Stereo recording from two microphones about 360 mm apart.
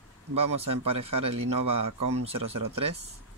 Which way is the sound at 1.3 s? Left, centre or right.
Right.